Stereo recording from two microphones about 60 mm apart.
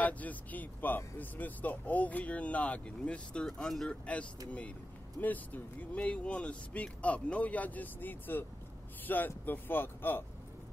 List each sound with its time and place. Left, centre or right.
0.0 s speech: left